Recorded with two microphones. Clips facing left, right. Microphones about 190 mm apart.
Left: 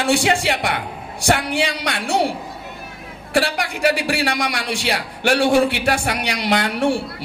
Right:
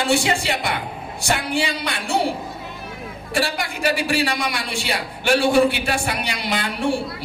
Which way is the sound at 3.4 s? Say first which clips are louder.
Left 1 dB; 70° left (ahead or behind).